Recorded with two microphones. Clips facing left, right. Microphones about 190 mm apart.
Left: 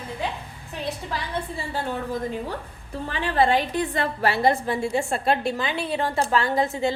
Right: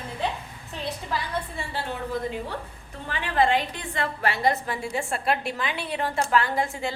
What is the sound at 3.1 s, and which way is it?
A woman's voice, 35° left (ahead or behind).